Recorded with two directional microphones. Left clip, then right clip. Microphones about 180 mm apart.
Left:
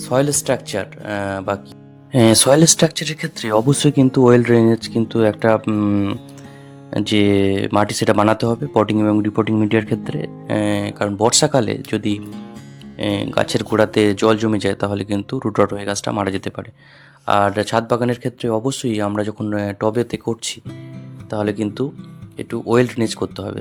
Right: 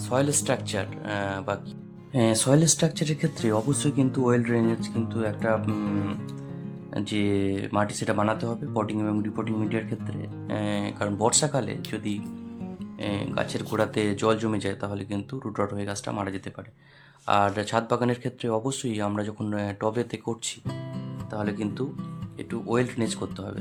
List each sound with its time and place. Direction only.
0.0 s speech: 25° left (ahead or behind)
2.1 s speech: 50° left (ahead or behind)
17.2 s speech: 30° left (ahead or behind)